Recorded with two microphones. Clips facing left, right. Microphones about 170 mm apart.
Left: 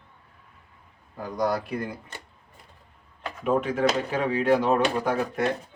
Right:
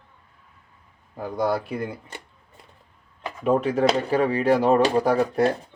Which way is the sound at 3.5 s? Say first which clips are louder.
Right 3 dB; 35° right (ahead or behind).